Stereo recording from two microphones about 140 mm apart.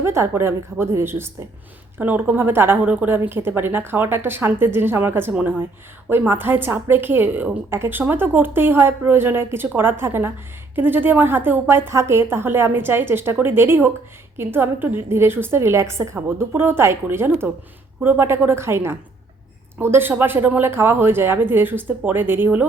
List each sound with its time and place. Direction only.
0.0 s a woman's voice: 20° right (ahead or behind)